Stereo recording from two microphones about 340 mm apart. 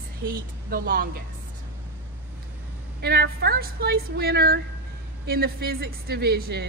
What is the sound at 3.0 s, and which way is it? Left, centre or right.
Speech, right.